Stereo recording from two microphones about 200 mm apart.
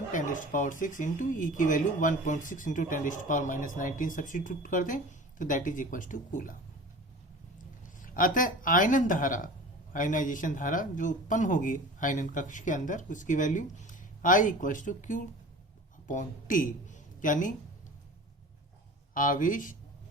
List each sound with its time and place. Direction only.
0.1 s speech: 40° left (ahead or behind)
8.0 s speech: 45° left (ahead or behind)
19.1 s speech: 40° left (ahead or behind)